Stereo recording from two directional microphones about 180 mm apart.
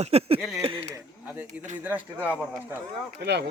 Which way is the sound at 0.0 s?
35° right (ahead or behind).